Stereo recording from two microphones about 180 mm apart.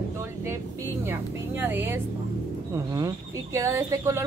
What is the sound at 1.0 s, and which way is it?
Speech, 10° right (ahead or behind).